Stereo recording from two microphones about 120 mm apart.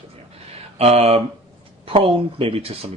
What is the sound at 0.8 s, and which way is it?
Speech, 60° right (ahead or behind).